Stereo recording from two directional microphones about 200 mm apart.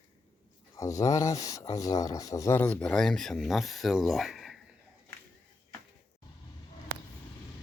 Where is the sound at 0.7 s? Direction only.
15° left (ahead or behind); by 4.6 s centre (ahead or behind).